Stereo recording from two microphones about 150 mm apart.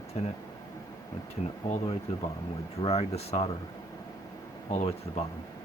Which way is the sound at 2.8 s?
45° left (ahead or behind).